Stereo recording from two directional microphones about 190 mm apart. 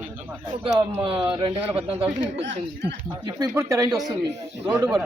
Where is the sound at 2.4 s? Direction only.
60° right (ahead or behind).